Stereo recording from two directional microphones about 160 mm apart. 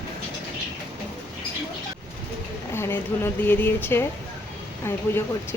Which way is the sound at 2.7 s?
15° left (ahead or behind).